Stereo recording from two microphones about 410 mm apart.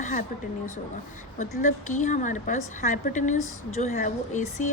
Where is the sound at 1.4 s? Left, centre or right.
Centre.